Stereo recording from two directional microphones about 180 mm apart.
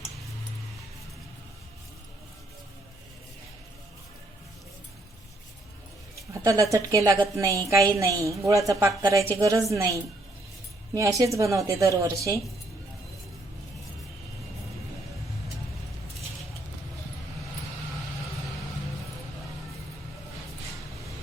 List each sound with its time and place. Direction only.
6.1 s a woman's voice: 15° right (ahead or behind)